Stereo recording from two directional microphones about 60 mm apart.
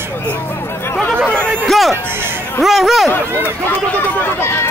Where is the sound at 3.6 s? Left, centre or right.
Left.